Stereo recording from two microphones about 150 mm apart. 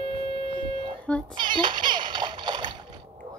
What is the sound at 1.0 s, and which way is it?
Child singing, 5° left (ahead or behind).